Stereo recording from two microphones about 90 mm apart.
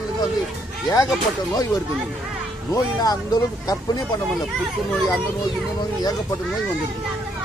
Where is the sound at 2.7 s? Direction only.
45° left (ahead or behind).